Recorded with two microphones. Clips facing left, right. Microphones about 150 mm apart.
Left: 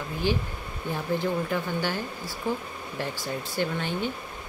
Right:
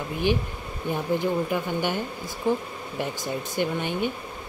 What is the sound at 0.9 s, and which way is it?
Speech, 15° right (ahead or behind).